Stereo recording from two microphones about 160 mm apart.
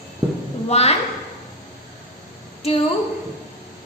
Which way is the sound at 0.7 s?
40° left (ahead or behind).